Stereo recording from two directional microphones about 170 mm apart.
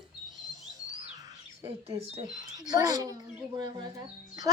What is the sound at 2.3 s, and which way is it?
Speech, 25° right (ahead or behind).